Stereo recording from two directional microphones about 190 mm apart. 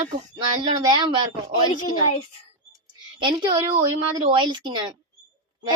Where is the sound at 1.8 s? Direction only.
35° left (ahead or behind).